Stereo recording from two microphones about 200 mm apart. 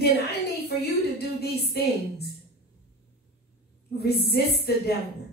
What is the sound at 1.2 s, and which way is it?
A woman's voice, 55° left (ahead or behind).